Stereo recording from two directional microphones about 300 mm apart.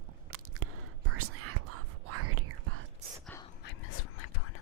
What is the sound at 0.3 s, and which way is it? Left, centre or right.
Biting, right.